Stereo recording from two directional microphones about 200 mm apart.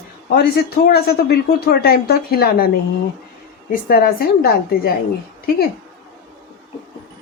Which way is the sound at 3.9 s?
50° left (ahead or behind).